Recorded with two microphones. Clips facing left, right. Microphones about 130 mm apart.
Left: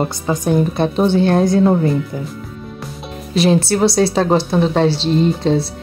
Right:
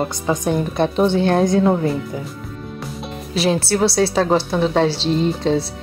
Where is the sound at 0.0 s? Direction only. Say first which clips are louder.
Left 1 dB; 5° left (ahead or behind).